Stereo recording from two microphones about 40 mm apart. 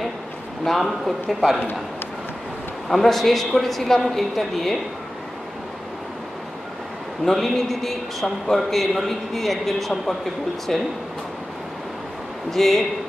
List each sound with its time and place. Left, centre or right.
0.7 s a man's voice: centre
2.9 s a man's voice: centre
7.2 s a man's voice: centre
12.4 s a man's voice: centre